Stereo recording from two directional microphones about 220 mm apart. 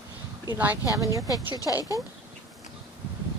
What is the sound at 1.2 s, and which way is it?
Speech, 15° left (ahead or behind).